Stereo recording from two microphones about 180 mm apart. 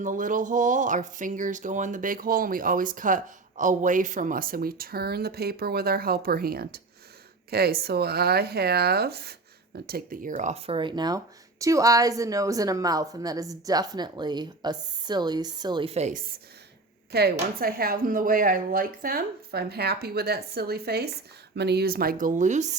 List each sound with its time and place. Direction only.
0.0 s a woman's voice: 45° right (ahead or behind)
17.1 s speech: 60° right (ahead or behind); by 22.8 s 40° right (ahead or behind)